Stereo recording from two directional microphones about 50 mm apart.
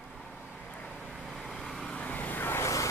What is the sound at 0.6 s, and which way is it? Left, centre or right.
Vehicle, centre.